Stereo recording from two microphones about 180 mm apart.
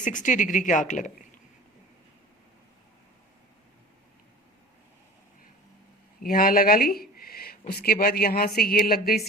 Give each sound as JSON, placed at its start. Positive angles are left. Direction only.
{"t": 0.0, "sound": "speech", "side_deg": 45}
{"t": 6.2, "sound": "a woman's voice", "side_deg": 55}